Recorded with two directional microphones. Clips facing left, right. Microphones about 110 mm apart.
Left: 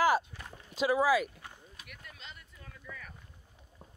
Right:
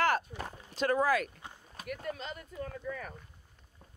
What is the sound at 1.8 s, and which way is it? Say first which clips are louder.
Speech: right 17 dB; 45° right (ahead or behind).